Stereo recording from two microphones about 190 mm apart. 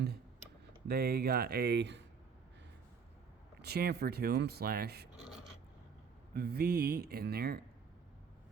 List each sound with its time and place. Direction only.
0.9 s speech: 55° right (ahead or behind)
3.6 s speech: 55° right (ahead or behind)
6.3 s speech: 55° right (ahead or behind)